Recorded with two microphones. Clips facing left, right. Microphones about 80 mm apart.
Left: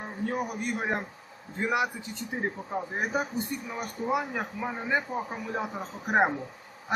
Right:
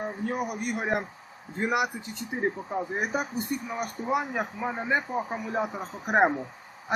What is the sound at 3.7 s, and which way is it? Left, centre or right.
A man's voice, centre.